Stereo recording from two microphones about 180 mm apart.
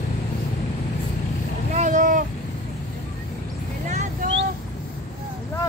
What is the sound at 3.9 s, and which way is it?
Vehicle, 40° right (ahead or behind).